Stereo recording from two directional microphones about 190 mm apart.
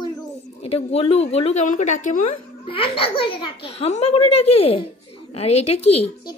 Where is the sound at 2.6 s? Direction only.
30° left (ahead or behind).